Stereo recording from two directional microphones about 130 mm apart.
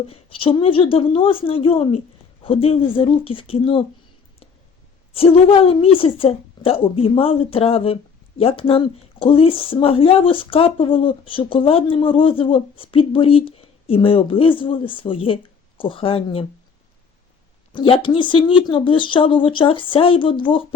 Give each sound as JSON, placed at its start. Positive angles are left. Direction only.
{"t": 0.1, "sound": "a woman's voice", "side_deg": 45}
{"t": 5.1, "sound": "a woman's voice", "side_deg": 45}
{"t": 17.7, "sound": "speech", "side_deg": 40}